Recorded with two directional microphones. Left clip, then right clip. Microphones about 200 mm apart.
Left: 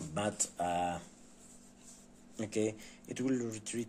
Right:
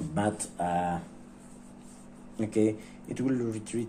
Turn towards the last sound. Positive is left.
turn(degrees=35)  # may be behind; listen again after turning